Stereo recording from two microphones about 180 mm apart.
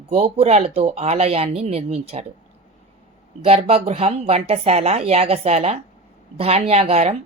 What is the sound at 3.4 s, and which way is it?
Speech, 35° right (ahead or behind).